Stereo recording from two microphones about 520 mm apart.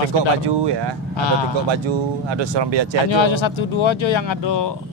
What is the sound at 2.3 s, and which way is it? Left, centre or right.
Speech, right.